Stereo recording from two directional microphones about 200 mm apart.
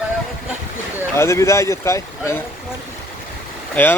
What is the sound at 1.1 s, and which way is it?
Speech, 15° left (ahead or behind).